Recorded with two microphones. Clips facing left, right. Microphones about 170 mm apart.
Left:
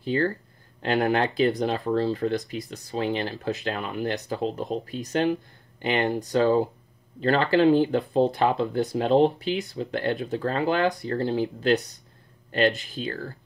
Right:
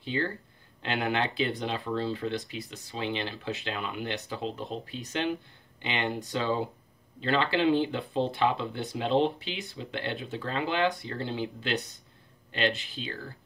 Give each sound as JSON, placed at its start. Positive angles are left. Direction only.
{"t": 0.0, "sound": "speech", "side_deg": 45}